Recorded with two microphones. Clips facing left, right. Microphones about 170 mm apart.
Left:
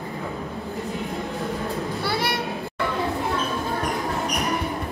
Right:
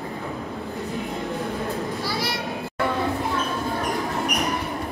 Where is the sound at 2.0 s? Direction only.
60° left (ahead or behind).